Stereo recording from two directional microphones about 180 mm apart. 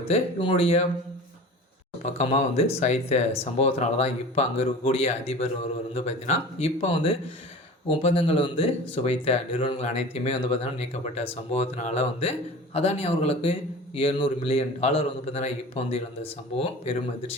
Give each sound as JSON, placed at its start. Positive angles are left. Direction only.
{"t": 0.1, "sound": "speech", "side_deg": 35}
{"t": 2.0, "sound": "speech", "side_deg": 35}